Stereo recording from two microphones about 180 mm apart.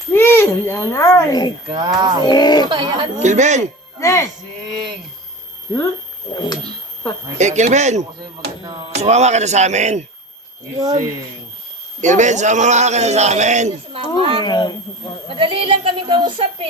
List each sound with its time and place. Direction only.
0.1 s a child's voice: 10° left (ahead or behind)
1.6 s speech: 25° right (ahead or behind)
2.2 s speech: 25° left (ahead or behind)
2.6 s speech: 25° right (ahead or behind)
3.2 s a man's voice: 40° right (ahead or behind)
4.0 s speech: 15° left (ahead or behind)
6.3 s speech: 25° left (ahead or behind)
7.3 s a man's voice: 40° right (ahead or behind)
10.8 s speech: 20° right (ahead or behind)
11.9 s a man's voice: 40° right (ahead or behind)
14.4 s speech: 25° left (ahead or behind)
15.3 s speech: 30° right (ahead or behind)